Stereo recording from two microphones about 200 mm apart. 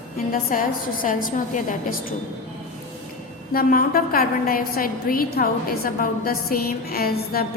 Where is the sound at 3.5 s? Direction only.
45° left (ahead or behind).